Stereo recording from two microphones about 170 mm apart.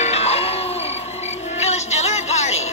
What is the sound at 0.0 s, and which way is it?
Music, 40° left (ahead or behind).